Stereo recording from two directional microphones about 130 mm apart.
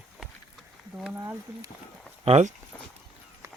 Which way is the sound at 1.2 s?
25° right (ahead or behind).